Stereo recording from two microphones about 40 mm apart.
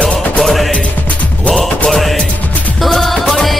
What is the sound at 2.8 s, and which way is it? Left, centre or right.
Music, centre.